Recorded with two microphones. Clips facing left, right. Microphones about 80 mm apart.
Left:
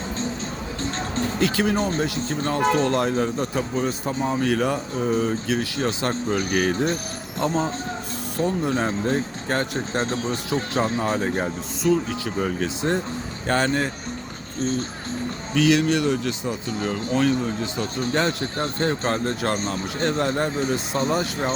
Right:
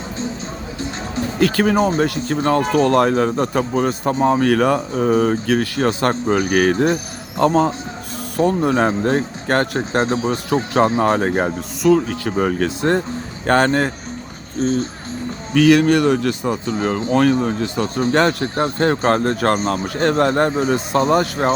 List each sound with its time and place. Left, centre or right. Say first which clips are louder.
0.8 s music: right 2 dB; centre
1.4 s speech: right 7 dB; right
15.5 s speech: right 7 dB; right
16.7 s speech: right 5 dB; right
17.1 s speech: right 6 dB; right